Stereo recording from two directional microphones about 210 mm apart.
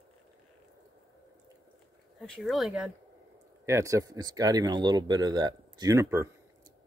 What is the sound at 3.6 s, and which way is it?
Speech, 15° right (ahead or behind).